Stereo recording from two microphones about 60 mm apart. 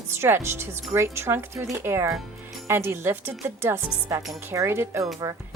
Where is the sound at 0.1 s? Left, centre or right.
Right.